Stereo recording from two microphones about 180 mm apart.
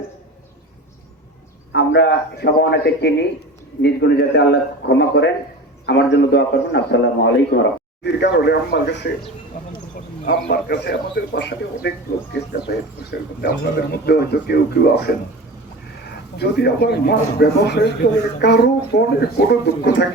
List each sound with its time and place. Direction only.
1.7 s a man's voice: 70° left (ahead or behind)
10.2 s speech: 65° left (ahead or behind)
16.4 s speech: 65° left (ahead or behind)